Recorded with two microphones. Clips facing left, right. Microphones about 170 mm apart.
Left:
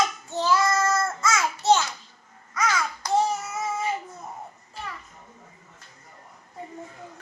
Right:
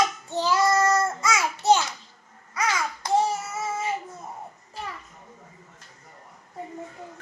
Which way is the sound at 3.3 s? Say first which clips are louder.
Even; 5° right (ahead or behind).